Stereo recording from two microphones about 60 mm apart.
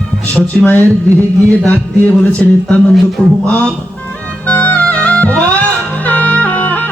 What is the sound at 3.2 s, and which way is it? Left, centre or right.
Speech, centre.